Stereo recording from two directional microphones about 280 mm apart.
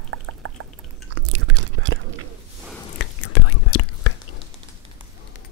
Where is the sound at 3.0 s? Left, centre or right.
Left.